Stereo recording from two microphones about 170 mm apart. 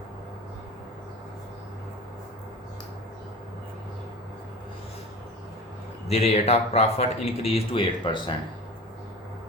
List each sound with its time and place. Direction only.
6.1 s speech: 40° left (ahead or behind)